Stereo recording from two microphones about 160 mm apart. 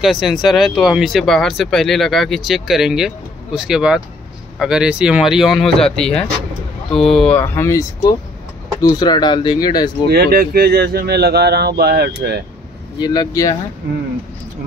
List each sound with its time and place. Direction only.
0.0 s speech: centre (ahead or behind)
7.3 s speech: 15° left (ahead or behind)
10.0 s speech: 80° right
13.0 s speech: 25° left (ahead or behind)